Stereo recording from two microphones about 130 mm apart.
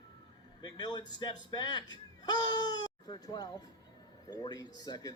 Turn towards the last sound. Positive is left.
turn(degrees=30)  # may be behind; listen again after turning